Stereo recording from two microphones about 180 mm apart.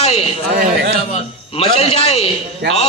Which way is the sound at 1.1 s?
35° left (ahead or behind).